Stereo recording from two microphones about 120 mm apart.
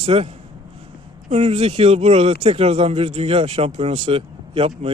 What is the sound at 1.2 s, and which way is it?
Speech, 60° right (ahead or behind).